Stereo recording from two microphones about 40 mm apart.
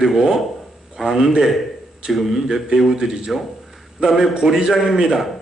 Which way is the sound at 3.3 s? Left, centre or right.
Centre.